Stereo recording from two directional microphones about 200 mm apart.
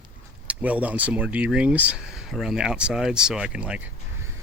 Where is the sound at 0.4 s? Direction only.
5° right (ahead or behind).